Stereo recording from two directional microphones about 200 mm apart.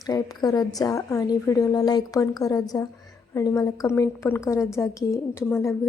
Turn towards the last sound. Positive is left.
turn(degrees=15)  # may be behind; listen again after turning